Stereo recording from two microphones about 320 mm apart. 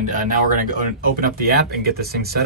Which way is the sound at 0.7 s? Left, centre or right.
Right.